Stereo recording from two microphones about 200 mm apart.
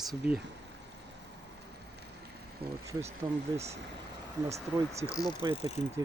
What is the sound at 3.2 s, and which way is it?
Speech, 15° right (ahead or behind).